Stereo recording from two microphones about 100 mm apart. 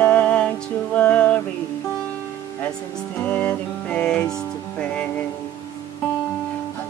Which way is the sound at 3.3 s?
15° left (ahead or behind).